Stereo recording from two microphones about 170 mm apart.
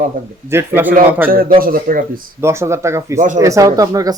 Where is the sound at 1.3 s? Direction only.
60° right (ahead or behind).